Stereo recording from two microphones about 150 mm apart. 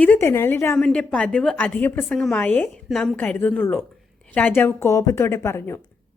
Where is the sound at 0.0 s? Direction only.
10° left (ahead or behind).